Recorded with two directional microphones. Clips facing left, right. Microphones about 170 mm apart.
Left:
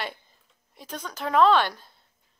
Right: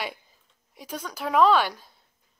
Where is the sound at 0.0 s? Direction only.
10° right (ahead or behind).